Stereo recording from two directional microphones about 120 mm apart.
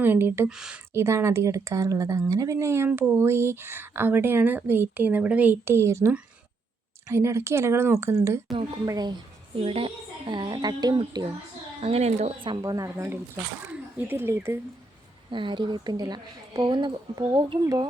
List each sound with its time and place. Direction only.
0.0 s speech: 20° right (ahead or behind)
0.5 s speech: 5° right (ahead or behind)
0.9 s speech: 25° right (ahead or behind)
8.9 s a woman's voice: 35° right (ahead or behind)
9.6 s a woman's voice: 50° right (ahead or behind); by 11.3 s 35° right (ahead or behind)
11.8 s speech: 60° right (ahead or behind)
12.4 s speech: 45° right (ahead or behind)
12.6 s speech: 30° right (ahead or behind)
15.3 s a woman's voice: 40° right (ahead or behind)